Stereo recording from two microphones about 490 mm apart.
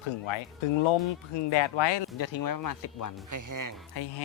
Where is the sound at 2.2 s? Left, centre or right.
Left.